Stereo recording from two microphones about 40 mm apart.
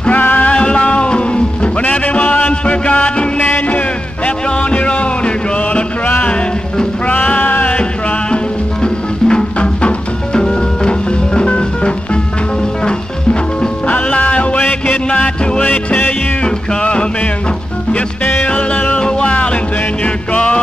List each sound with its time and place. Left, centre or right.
0.4 s music: left
4.6 s music: left
7.1 s music: left
8.8 s music: left
18.2 s music: left
18.5 s music: left
18.9 s music: left